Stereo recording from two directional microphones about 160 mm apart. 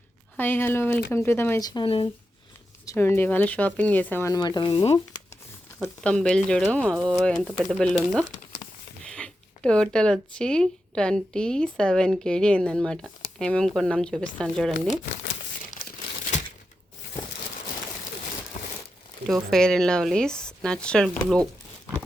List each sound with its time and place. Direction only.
0.3 s speech: 15° left (ahead or behind); by 2.0 s 30° left (ahead or behind)
2.8 s speech: 15° left (ahead or behind); by 4.9 s 35° left (ahead or behind)
5.8 s speech: 5° left (ahead or behind)
19.3 s speech: 5° left (ahead or behind)